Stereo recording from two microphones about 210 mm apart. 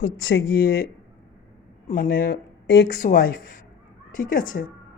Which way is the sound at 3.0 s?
45° left (ahead or behind).